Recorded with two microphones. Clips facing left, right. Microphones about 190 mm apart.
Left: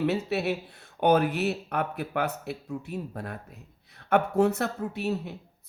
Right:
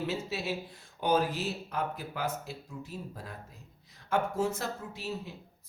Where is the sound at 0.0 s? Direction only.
65° left (ahead or behind).